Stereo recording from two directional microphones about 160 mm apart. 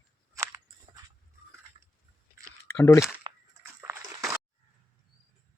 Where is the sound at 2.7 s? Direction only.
15° left (ahead or behind).